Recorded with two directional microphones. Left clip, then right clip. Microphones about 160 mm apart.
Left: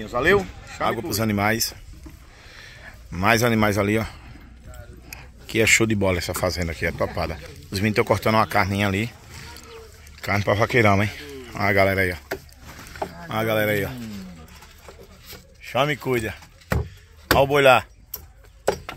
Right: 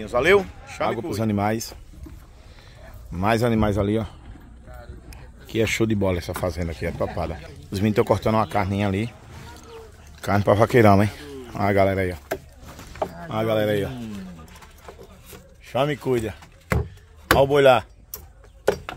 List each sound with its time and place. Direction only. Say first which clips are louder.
0.0 s a man's voice: right 2 dB; 30° right (ahead or behind)
0.8 s speech: left 1 dB; centre (ahead or behind)
7.7 s speech: even; 20° right (ahead or behind)
10.2 s a man's voice: right 2 dB; 35° right (ahead or behind); by 12.2 s 10° right (ahead or behind)
13.3 s speech: left 1 dB; centre (ahead or behind)
15.6 s door: left 1 dB; centre (ahead or behind)
17.3 s speech: even; 5° right (ahead or behind)